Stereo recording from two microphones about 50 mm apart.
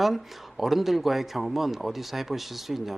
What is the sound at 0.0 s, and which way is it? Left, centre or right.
Speech, centre.